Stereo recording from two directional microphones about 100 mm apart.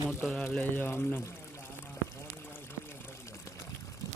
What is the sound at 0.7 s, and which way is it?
Speech, 25° left (ahead or behind).